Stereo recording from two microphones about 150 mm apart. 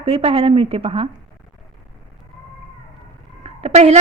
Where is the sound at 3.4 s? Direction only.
45° right (ahead or behind).